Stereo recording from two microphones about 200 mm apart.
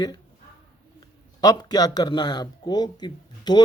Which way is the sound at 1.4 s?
20° left (ahead or behind).